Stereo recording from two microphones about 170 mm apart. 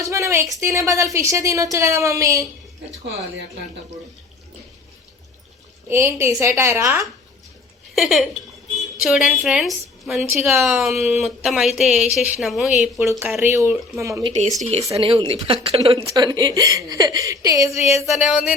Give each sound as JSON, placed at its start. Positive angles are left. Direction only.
{"t": 0.0, "sound": "a sound", "side_deg": -15}
{"t": 0.6, "sound": "a woman's voice", "side_deg": -15}
{"t": 5.9, "sound": "a woman's voice", "side_deg": -15}
{"t": 7.9, "sound": "a woman's voice", "side_deg": 0}
{"t": 13.0, "sound": "a woman's voice", "side_deg": -15}
{"t": 14.6, "sound": "speech", "side_deg": -40}
{"t": 16.1, "sound": "a woman's voice", "side_deg": -25}
{"t": 18.1, "sound": "a woman's voice", "side_deg": 0}